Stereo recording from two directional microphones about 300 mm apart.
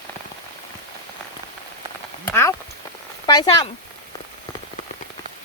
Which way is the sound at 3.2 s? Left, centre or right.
Centre.